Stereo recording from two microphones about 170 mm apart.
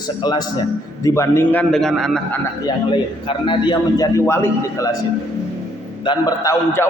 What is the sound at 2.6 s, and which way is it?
A man's voice, 30° left (ahead or behind).